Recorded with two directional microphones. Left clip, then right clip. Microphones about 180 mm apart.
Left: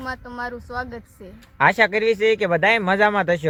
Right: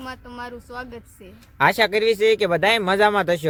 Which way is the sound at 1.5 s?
20° right (ahead or behind).